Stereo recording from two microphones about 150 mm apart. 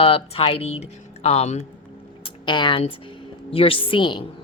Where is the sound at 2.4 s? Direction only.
35° left (ahead or behind).